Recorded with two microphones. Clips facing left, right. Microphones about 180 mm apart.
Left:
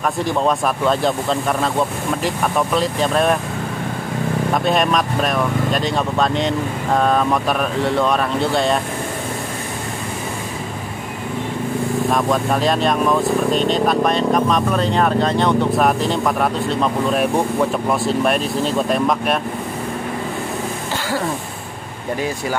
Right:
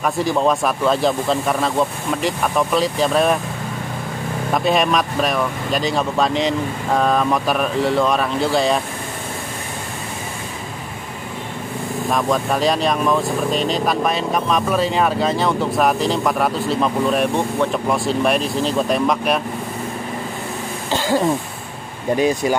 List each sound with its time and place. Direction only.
0.0 s speech: centre (ahead or behind)
4.6 s speech: centre (ahead or behind)
12.1 s speech: centre (ahead or behind)
22.1 s speech: 20° right (ahead or behind)